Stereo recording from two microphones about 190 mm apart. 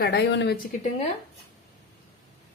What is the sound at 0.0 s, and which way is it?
Speech, 60° left (ahead or behind).